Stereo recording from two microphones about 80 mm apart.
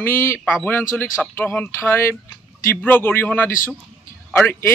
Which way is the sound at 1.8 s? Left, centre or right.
Left.